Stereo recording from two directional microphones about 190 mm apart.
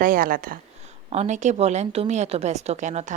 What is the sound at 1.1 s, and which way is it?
A woman's voice, 35° right (ahead or behind).